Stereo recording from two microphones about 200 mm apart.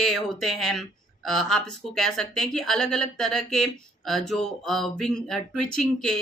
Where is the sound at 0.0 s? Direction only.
Centre (ahead or behind).